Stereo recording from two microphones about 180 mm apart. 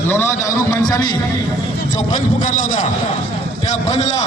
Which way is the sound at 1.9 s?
45° left (ahead or behind).